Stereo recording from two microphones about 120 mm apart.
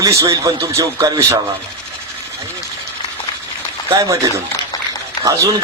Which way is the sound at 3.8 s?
25° right (ahead or behind).